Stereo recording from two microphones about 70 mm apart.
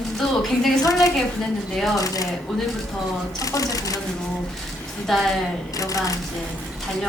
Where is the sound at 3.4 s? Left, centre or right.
Left.